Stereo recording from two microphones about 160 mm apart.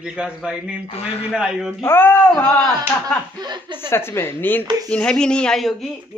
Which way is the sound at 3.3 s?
25° right (ahead or behind).